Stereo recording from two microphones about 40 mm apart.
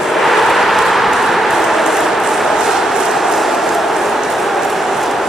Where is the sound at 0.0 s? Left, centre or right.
Centre.